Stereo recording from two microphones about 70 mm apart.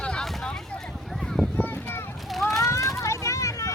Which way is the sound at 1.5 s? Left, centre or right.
Left.